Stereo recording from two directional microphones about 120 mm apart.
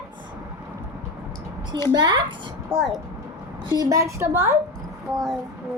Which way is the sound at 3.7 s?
30° right (ahead or behind).